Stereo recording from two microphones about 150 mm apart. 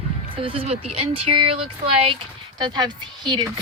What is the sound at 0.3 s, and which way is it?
Speech, 40° right (ahead or behind).